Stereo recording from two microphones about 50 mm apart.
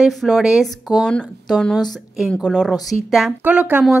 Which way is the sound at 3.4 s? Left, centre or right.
Right.